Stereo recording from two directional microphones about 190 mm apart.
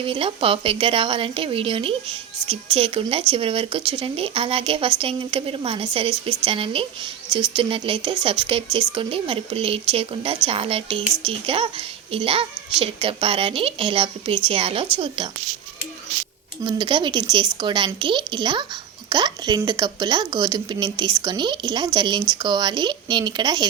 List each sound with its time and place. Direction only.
0.0 s speech: 30° right (ahead or behind)
16.6 s speech: 25° right (ahead or behind)